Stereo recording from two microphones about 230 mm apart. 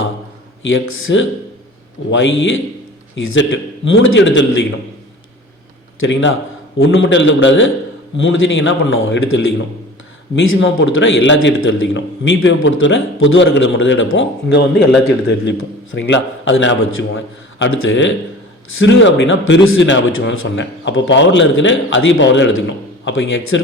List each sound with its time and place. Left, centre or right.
0.6 s a man's voice: left
3.8 s a man's voice: left
6.0 s a man's voice: left